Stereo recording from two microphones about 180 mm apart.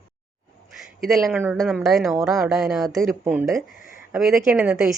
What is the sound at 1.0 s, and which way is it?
Speech, centre (ahead or behind).